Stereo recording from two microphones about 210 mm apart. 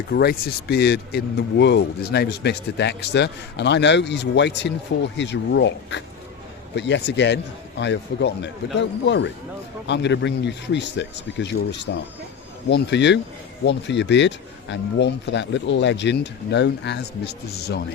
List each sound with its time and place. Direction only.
0.1 s speech: 50° left (ahead or behind)